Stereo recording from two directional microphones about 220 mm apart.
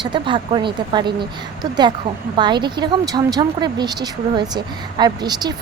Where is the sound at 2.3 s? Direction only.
20° right (ahead or behind).